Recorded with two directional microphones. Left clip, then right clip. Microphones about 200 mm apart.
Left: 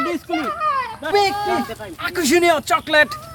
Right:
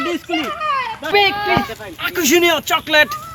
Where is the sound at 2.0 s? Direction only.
15° left (ahead or behind).